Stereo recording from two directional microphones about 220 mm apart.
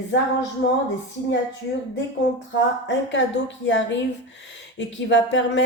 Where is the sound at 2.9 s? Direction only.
55° left (ahead or behind).